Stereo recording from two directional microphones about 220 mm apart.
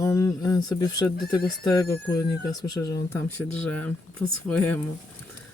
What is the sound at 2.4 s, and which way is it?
Speech, 15° left (ahead or behind).